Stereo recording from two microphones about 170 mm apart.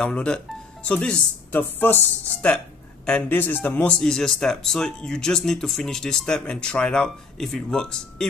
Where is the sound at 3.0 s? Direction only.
10° left (ahead or behind).